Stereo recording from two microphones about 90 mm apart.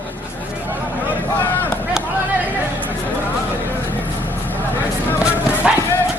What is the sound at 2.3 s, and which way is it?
Chatter, 20° right (ahead or behind).